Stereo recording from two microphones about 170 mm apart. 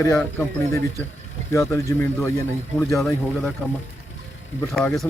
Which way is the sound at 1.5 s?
15° left (ahead or behind).